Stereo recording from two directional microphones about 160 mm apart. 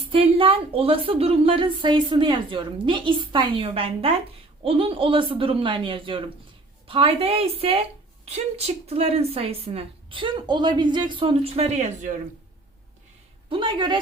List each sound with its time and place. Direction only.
0.1 s a woman's voice: 35° right (ahead or behind)
13.5 s a woman's voice: 30° right (ahead or behind)